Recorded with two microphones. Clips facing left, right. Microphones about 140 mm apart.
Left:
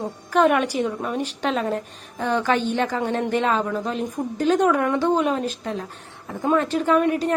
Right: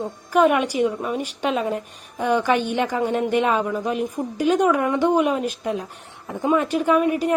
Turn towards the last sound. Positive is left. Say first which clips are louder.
# right 1 dB
turn(degrees=-10)  # may be behind; listen again after turning